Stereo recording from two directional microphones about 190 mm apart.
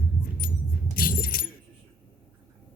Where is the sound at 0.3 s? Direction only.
50° left (ahead or behind).